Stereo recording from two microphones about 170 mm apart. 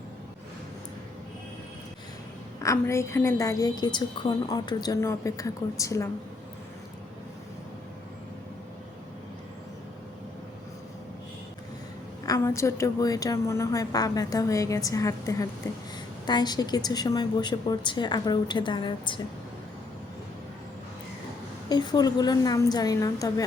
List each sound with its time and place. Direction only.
2.6 s a woman's voice: 15° left (ahead or behind)
12.2 s a woman's voice: 20° left (ahead or behind)
21.7 s a woman's voice: 25° left (ahead or behind)